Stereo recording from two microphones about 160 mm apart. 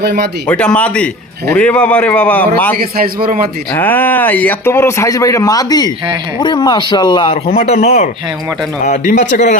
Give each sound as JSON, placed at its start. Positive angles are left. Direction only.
{"t": 0.0, "sound": "speech", "side_deg": -90}
{"t": 0.4, "sound": "speech", "side_deg": 5}
{"t": 2.7, "sound": "a man's voice", "side_deg": -70}
{"t": 3.8, "sound": "speech", "side_deg": 10}
{"t": 7.7, "sound": "speech", "side_deg": 45}